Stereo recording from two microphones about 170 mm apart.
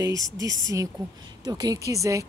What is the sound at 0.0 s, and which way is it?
Speech, 20° right (ahead or behind).